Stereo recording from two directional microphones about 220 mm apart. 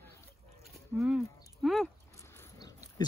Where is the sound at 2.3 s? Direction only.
15° left (ahead or behind).